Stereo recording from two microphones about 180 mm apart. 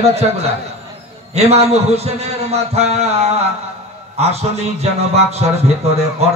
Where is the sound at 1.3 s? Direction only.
35° right (ahead or behind).